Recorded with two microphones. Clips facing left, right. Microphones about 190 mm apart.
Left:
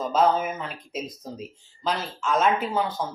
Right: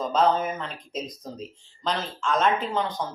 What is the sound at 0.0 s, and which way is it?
Speech, 5° left (ahead or behind).